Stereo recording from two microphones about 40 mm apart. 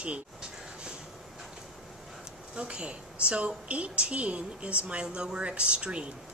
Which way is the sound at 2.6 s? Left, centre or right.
Right.